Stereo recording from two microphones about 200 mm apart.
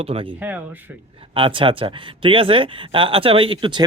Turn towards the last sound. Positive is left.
turn(degrees=-25)  # may be behind; listen again after turning